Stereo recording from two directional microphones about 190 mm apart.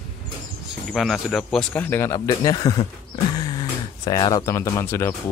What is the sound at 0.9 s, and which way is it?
A man's voice, centre (ahead or behind).